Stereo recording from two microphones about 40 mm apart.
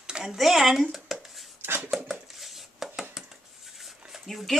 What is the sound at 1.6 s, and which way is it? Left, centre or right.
Dishes, right.